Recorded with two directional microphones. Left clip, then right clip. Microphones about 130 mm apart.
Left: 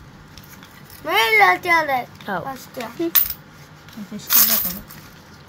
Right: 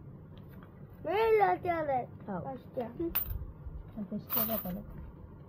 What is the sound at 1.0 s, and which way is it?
Speech, 20° right (ahead or behind).